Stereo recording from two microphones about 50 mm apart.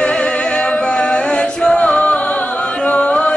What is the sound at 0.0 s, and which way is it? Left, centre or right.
Music, left.